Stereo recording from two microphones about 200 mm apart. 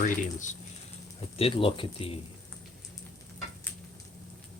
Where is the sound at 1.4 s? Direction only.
30° left (ahead or behind).